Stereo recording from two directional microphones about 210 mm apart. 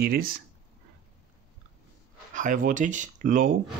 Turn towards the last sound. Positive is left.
turn(degrees=-40)  # may be behind; listen again after turning